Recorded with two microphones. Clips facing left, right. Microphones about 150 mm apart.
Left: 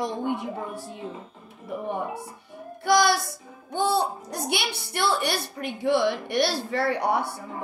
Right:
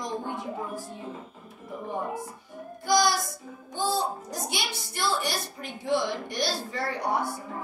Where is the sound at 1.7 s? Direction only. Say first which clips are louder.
Left 5 dB; 65° left (ahead or behind).